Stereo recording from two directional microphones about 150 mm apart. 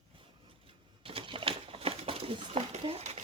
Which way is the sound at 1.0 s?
35° right (ahead or behind).